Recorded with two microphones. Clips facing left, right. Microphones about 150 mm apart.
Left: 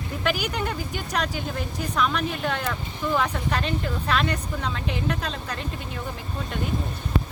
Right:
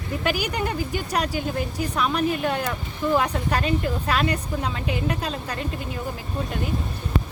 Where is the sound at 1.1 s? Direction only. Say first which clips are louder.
Right 1 dB; 10° right (ahead or behind).